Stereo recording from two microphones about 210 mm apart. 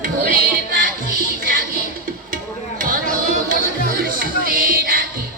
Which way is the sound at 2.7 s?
40° right (ahead or behind).